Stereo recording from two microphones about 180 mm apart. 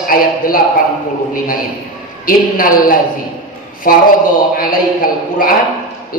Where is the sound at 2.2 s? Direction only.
50° left (ahead or behind).